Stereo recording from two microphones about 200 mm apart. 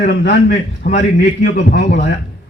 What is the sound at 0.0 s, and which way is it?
A man's voice, 55° left (ahead or behind).